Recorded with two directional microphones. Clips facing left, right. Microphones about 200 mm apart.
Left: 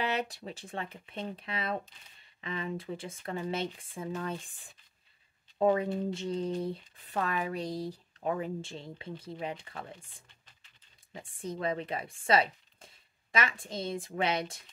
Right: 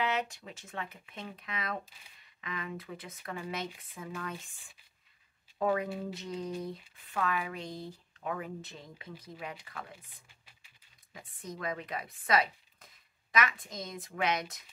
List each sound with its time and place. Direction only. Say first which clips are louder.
0.0 s a woman's voice: left 1 dB; 35° left (ahead or behind)
10.2 s a sound: even; 10° right (ahead or behind)
11.1 s speech: left 5 dB; 30° left (ahead or behind)